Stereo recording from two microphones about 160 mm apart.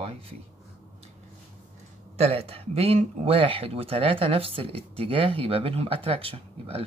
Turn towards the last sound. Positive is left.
turn(degrees=-35)  # may be behind; listen again after turning